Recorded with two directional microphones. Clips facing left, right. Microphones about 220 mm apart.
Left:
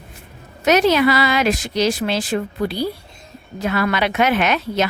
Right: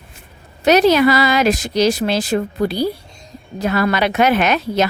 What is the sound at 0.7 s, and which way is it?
Speech, 35° right (ahead or behind).